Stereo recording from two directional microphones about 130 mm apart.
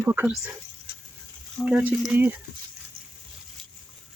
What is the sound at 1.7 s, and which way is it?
Speech, 10° right (ahead or behind).